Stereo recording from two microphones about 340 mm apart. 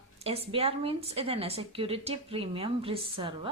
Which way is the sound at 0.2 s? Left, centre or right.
Centre.